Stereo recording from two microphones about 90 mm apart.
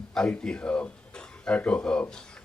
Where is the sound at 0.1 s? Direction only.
10° left (ahead or behind).